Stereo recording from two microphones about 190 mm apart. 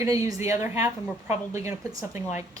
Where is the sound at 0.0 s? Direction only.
15° right (ahead or behind).